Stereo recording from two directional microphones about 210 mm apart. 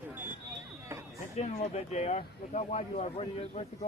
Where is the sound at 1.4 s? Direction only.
30° left (ahead or behind).